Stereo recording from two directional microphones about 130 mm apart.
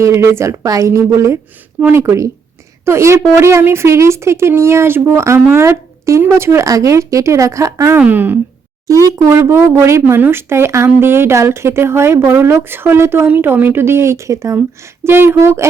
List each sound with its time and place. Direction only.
0.0 s speech: 20° right (ahead or behind)
7.9 s speech: 15° right (ahead or behind)